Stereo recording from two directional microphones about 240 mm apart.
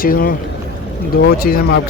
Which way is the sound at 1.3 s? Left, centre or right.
Left.